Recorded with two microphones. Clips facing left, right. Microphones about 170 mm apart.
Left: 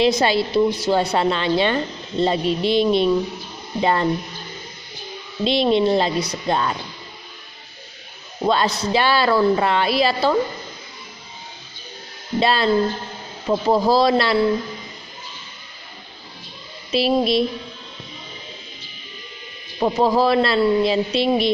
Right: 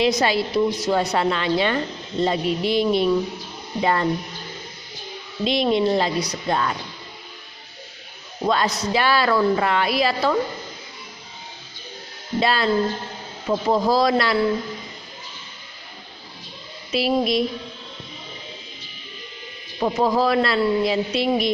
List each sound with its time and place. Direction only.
0.0 s a woman's voice: 25° left (ahead or behind)
5.5 s a woman's voice: 25° left (ahead or behind)
8.4 s a woman's voice: 25° left (ahead or behind)
12.4 s a woman's voice: 25° left (ahead or behind)
16.9 s a woman's voice: 25° left (ahead or behind)
19.8 s a woman's voice: 30° left (ahead or behind)